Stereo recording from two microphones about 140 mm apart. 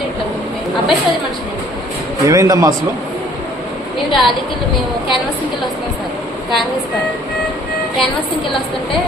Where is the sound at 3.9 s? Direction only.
Centre (ahead or behind).